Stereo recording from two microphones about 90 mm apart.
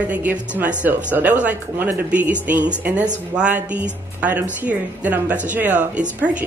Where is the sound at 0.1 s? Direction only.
20° right (ahead or behind).